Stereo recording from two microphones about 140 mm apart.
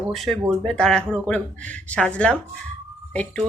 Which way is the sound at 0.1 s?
Centre (ahead or behind).